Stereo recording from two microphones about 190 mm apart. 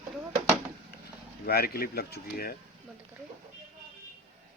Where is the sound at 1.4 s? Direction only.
55° left (ahead or behind).